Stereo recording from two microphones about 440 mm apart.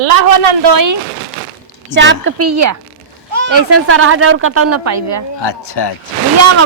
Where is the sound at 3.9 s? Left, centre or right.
Right.